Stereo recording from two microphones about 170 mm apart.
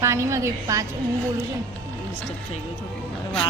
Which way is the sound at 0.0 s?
15° right (ahead or behind).